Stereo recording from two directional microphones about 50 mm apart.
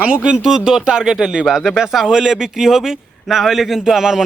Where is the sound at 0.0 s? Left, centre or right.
Centre.